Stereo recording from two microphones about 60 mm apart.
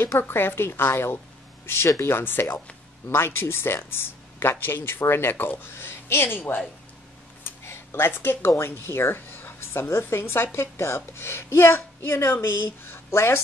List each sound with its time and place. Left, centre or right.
0.3 s speech: left
7.4 s a sound: left
8.5 s a woman's voice: left